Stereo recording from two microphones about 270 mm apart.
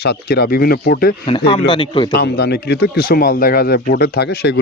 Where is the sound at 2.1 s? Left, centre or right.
Left.